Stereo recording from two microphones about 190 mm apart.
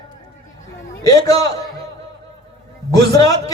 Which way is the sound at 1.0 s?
20° left (ahead or behind).